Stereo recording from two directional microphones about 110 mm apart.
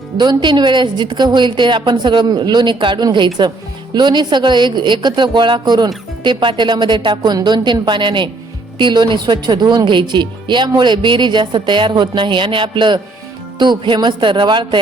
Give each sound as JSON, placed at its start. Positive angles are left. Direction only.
{"t": 0.2, "sound": "a woman's voice", "side_deg": -40}